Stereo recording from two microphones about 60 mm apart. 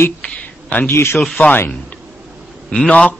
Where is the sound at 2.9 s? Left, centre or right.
Left.